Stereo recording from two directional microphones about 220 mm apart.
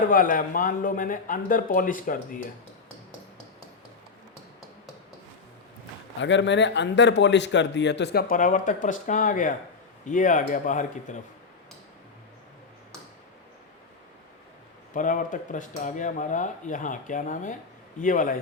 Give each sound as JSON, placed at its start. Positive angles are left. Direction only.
{"t": 0.1, "sound": "speech", "side_deg": 40}
{"t": 6.1, "sound": "speech", "side_deg": 55}
{"t": 14.9, "sound": "speech", "side_deg": 35}